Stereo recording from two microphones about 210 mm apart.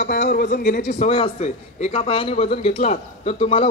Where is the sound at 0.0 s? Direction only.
50° left (ahead or behind).